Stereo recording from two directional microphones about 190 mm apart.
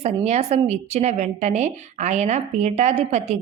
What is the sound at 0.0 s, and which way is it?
A woman's voice, 35° right (ahead or behind).